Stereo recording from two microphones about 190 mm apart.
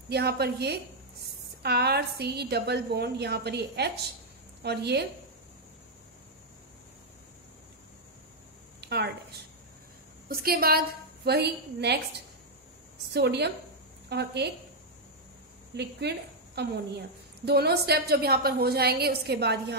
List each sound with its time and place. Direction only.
0.1 s a woman's voice: 60° right (ahead or behind)
8.8 s a sound: 60° right (ahead or behind)
10.2 s a woman's voice: 50° right (ahead or behind)
13.1 s a woman's voice: 60° right (ahead or behind)
15.7 s a woman's voice: 60° right (ahead or behind)